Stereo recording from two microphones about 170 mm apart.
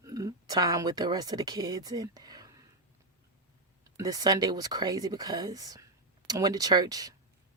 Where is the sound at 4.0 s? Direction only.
20° right (ahead or behind).